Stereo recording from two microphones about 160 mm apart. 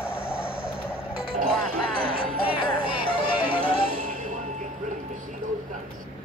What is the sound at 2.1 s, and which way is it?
Music, 35° left (ahead or behind).